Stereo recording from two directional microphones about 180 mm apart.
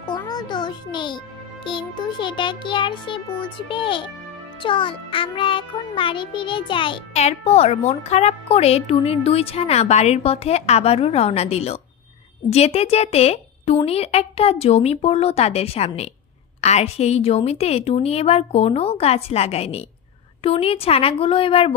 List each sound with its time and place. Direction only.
0.3 s a child's voice: 25° left (ahead or behind)